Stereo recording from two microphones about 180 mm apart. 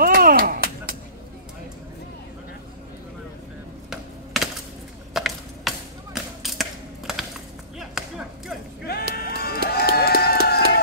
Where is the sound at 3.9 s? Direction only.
Centre (ahead or behind).